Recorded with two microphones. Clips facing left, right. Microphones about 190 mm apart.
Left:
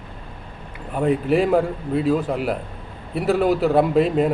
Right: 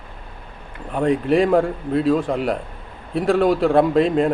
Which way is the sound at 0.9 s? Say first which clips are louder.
Right 1 dB; 5° left (ahead or behind).